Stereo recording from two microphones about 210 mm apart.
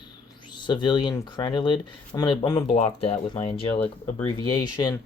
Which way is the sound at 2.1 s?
20° left (ahead or behind).